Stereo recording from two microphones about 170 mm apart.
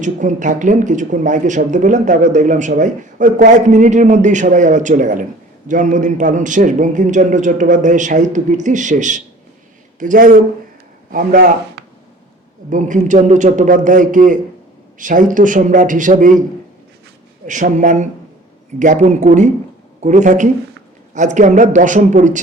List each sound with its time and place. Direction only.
0.0 s speech: 45° right (ahead or behind)
12.7 s speech: 45° right (ahead or behind)
17.4 s speech: 50° right (ahead or behind)